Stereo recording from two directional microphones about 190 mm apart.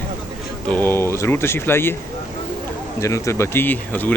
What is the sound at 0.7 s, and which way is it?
Speech, 10° left (ahead or behind).